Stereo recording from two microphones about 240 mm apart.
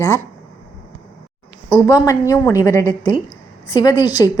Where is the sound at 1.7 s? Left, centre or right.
Centre.